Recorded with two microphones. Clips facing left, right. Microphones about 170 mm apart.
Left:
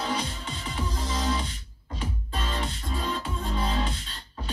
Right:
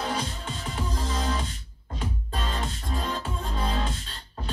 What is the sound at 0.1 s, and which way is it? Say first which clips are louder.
Music: even; 45° right (ahead or behind).